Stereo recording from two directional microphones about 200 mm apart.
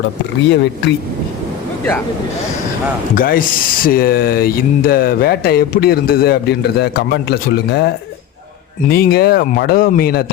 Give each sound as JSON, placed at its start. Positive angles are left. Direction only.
{"t": 0.4, "sound": "speech", "side_deg": 60}
{"t": 3.2, "sound": "speech", "side_deg": 45}
{"t": 8.9, "sound": "speech", "side_deg": 50}